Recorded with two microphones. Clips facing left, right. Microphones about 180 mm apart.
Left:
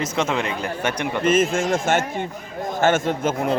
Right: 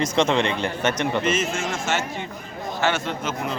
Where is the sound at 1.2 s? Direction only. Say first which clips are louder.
Left 5 dB; 50° left (ahead or behind).